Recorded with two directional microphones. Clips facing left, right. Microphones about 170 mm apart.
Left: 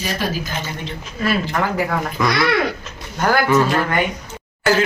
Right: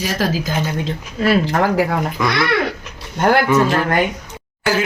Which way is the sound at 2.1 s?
10° left (ahead or behind).